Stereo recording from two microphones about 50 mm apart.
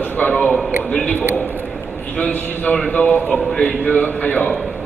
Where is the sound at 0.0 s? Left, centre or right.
Left.